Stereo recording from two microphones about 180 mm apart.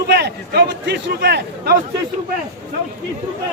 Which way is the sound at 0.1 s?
65° right (ahead or behind).